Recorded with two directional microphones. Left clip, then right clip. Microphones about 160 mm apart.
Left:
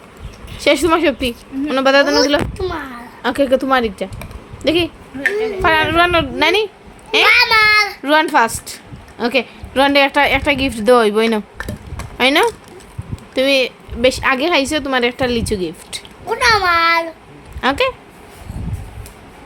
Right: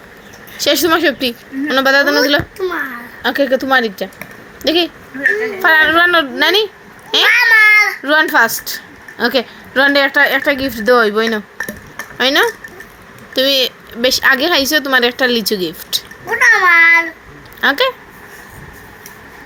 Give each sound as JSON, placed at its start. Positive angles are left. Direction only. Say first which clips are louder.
{"t": 0.6, "sound": "a woman's voice", "louder": "right 1 dB", "side_deg": 10}
{"t": 2.6, "sound": "a child's voice", "louder": "right 4 dB", "side_deg": 60}
{"t": 3.2, "sound": "a woman's voice", "louder": "right 1 dB", "side_deg": 15}
{"t": 7.4, "sound": "a child's voice", "louder": "right 4 dB", "side_deg": 30}
{"t": 8.0, "sound": "a woman's voice", "louder": "right 2 dB", "side_deg": 15}
{"t": 16.2, "sound": "a child's voice", "louder": "right 3 dB", "side_deg": 40}
{"t": 17.6, "sound": "a woman's voice", "louder": "right 3 dB", "side_deg": 5}